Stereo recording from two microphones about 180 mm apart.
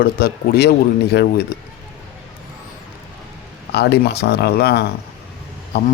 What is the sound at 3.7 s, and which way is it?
A man's voice, 65° left (ahead or behind).